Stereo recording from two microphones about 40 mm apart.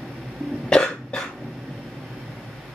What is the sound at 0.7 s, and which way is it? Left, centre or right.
Cough, left.